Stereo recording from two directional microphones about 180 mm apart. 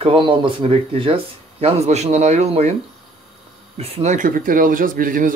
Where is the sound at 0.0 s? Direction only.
30° right (ahead or behind).